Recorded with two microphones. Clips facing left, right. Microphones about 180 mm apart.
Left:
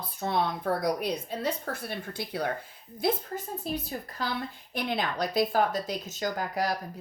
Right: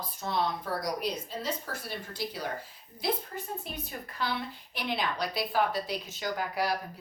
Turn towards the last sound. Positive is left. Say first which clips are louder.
# left 2 dB
turn(degrees=45)  # may be behind; listen again after turning